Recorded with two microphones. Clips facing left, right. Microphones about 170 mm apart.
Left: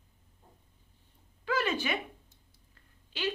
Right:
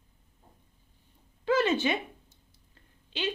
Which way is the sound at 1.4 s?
25° right (ahead or behind).